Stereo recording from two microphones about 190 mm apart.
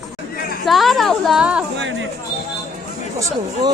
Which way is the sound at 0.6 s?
Centre (ahead or behind).